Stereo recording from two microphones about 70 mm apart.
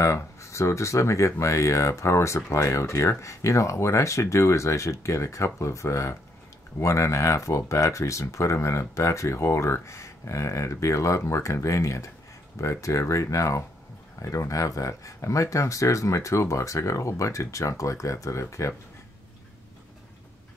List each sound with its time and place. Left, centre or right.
0.0 s speech: left